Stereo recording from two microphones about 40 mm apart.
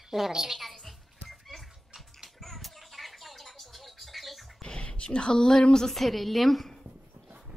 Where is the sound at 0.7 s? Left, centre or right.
Centre.